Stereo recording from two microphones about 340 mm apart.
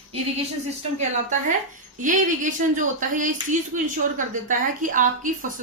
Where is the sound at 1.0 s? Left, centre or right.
Right.